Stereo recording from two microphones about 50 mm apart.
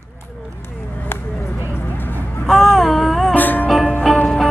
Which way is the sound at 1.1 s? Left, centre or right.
Left.